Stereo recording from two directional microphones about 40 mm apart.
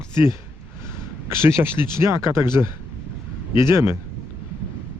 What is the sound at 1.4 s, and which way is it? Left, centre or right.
Speech, right.